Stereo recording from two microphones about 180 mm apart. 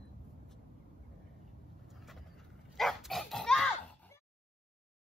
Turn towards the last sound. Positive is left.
turn(degrees=5)  # may be behind; listen again after turning